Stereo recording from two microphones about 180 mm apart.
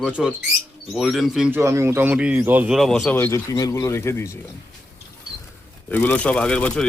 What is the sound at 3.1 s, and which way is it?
Speech, 15° left (ahead or behind).